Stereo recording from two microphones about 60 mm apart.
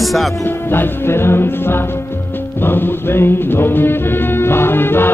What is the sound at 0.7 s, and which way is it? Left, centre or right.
Music, left.